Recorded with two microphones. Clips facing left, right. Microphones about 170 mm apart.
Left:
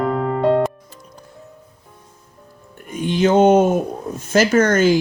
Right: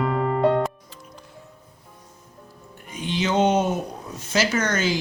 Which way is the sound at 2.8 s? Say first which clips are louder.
Left 8 dB; 50° left (ahead or behind).